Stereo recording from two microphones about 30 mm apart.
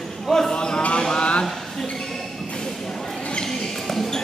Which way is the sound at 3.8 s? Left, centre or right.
Centre.